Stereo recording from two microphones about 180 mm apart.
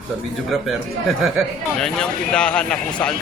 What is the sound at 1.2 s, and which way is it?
Speech, centre (ahead or behind).